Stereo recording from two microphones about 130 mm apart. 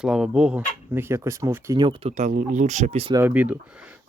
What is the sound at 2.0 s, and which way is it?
Speech, 65° right (ahead or behind).